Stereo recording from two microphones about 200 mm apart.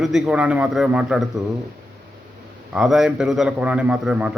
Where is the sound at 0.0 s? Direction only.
Centre (ahead or behind).